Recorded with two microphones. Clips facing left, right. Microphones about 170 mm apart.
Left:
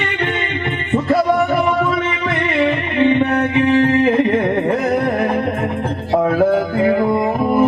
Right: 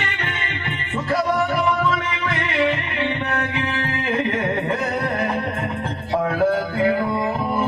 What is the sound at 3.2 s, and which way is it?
Music, 25° left (ahead or behind).